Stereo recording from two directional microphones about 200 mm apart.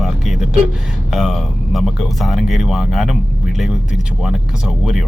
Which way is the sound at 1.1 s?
Centre (ahead or behind).